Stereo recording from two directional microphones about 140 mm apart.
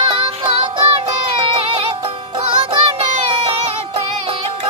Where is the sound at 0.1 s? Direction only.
35° right (ahead or behind).